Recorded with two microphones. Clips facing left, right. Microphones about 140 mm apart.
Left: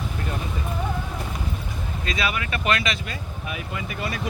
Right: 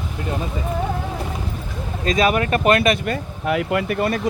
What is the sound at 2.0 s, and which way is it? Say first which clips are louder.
Speech: right 10 dB; 45° right (ahead or behind).